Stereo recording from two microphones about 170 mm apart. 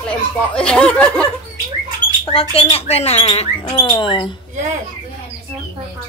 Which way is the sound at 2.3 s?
35° left (ahead or behind).